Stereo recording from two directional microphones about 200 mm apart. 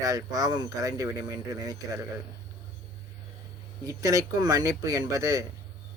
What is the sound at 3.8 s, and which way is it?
Speech, 15° right (ahead or behind).